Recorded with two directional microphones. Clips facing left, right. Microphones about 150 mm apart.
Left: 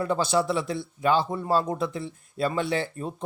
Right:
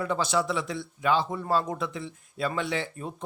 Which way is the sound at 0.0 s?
30° left (ahead or behind).